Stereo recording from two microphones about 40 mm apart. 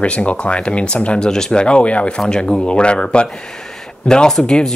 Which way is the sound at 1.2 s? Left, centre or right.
Centre.